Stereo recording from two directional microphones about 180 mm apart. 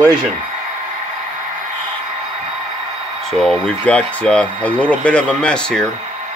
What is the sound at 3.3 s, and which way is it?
Speech, centre (ahead or behind).